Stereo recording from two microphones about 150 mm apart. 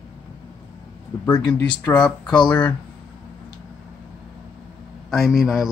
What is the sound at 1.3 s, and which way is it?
Speech, 30° left (ahead or behind).